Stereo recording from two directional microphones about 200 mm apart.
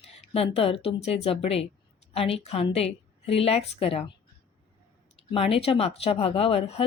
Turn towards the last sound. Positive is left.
turn(degrees=30)  # may be behind; listen again after turning